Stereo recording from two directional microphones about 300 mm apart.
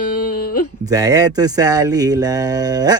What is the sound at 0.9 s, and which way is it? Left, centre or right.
Speech, centre.